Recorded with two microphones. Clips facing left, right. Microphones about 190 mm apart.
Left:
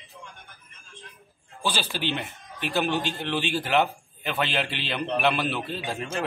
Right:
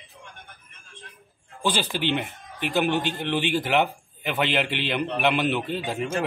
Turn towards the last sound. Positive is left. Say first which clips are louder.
# right 4 dB
turn(degrees=-15)  # may be behind; listen again after turning